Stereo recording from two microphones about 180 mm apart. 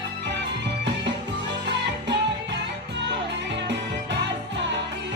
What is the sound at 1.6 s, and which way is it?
Music, 75° right (ahead or behind).